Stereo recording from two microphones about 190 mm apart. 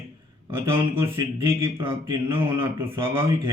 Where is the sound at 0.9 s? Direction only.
15° right (ahead or behind).